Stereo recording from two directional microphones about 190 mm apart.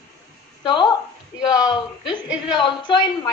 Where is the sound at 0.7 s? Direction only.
20° left (ahead or behind).